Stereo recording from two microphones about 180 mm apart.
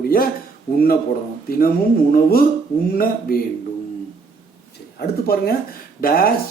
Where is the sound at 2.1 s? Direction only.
55° left (ahead or behind).